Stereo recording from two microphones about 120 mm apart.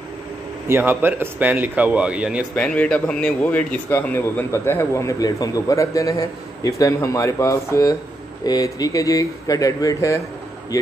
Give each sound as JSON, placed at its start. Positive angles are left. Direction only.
{"t": 0.7, "sound": "a man's voice", "side_deg": -20}
{"t": 2.5, "sound": "speech", "side_deg": 10}